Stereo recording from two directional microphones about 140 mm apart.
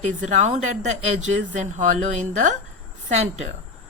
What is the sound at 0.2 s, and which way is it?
Speech, 60° right (ahead or behind).